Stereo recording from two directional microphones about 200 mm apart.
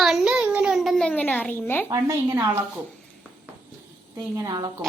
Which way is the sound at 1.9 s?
15° right (ahead or behind).